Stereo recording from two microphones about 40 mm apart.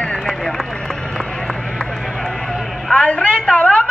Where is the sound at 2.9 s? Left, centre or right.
Left.